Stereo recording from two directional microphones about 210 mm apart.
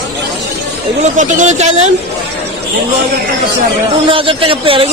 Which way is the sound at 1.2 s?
35° right (ahead or behind).